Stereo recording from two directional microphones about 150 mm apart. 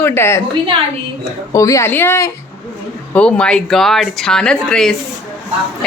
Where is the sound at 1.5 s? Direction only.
20° left (ahead or behind).